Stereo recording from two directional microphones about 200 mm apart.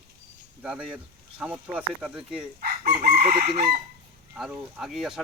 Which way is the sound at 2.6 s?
50° right (ahead or behind).